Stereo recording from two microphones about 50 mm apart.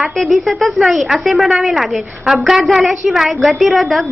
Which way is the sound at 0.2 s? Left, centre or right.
Centre.